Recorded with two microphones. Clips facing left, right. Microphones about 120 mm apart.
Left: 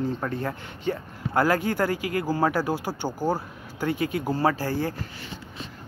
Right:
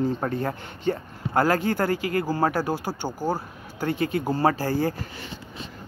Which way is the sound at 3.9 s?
10° left (ahead or behind).